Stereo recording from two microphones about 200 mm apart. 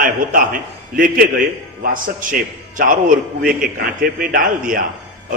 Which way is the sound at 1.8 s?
40° right (ahead or behind).